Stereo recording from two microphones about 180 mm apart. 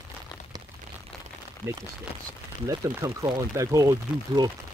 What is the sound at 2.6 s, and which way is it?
Speech, 20° right (ahead or behind).